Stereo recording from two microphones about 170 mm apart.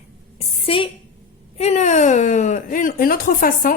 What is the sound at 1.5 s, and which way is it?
Speech, 40° left (ahead or behind).